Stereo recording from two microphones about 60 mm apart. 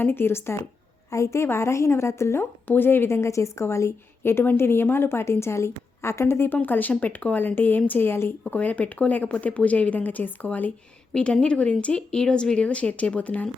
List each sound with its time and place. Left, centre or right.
0.0 s a woman's voice: left
1.1 s a woman's voice: left
2.6 s a woman's voice: left
6.6 s speech: left
8.5 s speech: left
11.1 s speech: centre